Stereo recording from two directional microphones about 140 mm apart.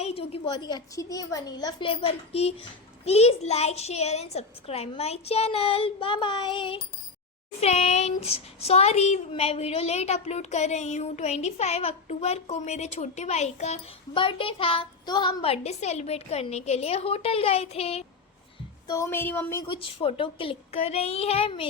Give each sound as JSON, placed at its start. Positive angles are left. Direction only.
{"t": 0.0, "sound": "a sound", "side_deg": 45}
{"t": 0.4, "sound": "a woman's voice", "side_deg": 30}
{"t": 1.9, "sound": "a child's voice", "side_deg": 45}
{"t": 7.6, "sound": "a child's voice", "side_deg": 50}
{"t": 14.1, "sound": "a child's voice", "side_deg": 40}
{"t": 18.9, "sound": "a woman's voice", "side_deg": 20}
{"t": 19.6, "sound": "speech", "side_deg": 40}